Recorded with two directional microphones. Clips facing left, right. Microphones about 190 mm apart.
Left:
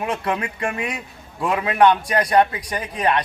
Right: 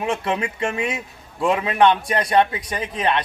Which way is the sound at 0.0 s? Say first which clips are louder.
Right 1 dB; 25° right (ahead or behind).